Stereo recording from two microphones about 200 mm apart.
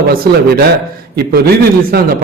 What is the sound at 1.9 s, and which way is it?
Speech, 50° right (ahead or behind).